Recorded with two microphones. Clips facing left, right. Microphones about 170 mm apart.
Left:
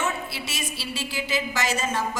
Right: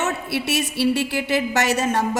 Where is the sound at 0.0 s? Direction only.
65° right (ahead or behind).